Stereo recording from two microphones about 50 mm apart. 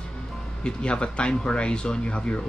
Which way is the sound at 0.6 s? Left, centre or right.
Centre.